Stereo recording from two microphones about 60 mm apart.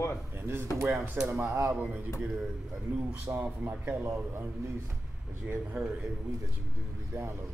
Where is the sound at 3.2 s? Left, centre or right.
Right.